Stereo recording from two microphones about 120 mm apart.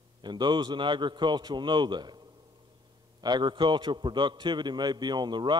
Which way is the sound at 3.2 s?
40° right (ahead or behind).